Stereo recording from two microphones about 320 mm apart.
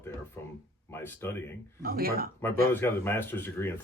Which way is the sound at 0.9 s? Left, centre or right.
Centre.